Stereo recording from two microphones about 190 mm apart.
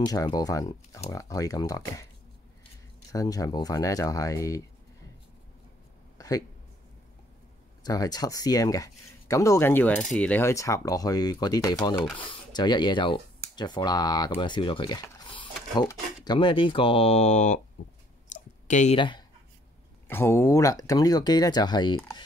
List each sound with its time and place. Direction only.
0.0 s speech: 20° left (ahead or behind)
3.1 s speech: 20° left (ahead or behind)
6.1 s a sound: 20° left (ahead or behind)
7.8 s speech: 20° left (ahead or behind)
14.4 s a sound: 25° left (ahead or behind)
16.3 s speech: 25° left (ahead or behind)
18.3 s clicking: 40° left (ahead or behind)
18.9 s speech: 25° left (ahead or behind)
20.1 s speech: 10° left (ahead or behind)